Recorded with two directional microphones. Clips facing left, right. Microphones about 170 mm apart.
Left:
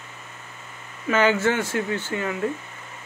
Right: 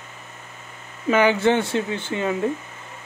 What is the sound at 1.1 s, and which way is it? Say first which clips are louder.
Speech: right 3 dB; 15° right (ahead or behind).